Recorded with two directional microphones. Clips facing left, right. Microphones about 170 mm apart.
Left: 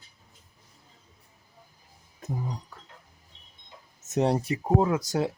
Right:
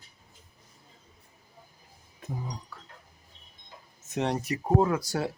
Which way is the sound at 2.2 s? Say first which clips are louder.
Left 3 dB; 40° left (ahead or behind).